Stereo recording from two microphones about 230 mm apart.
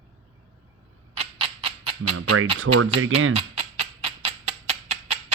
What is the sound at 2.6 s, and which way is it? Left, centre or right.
Speech, right.